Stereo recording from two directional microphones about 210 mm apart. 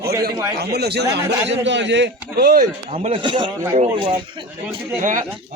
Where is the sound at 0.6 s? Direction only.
50° right (ahead or behind).